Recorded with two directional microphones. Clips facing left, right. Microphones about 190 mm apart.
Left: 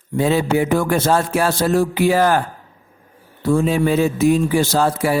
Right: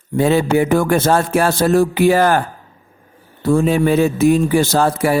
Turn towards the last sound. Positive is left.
turn(degrees=-55)  # may be behind; listen again after turning